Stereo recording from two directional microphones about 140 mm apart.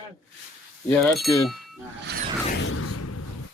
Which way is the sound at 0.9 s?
Centre (ahead or behind).